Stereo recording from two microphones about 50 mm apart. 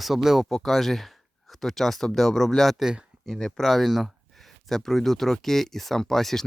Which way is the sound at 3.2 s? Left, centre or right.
Centre.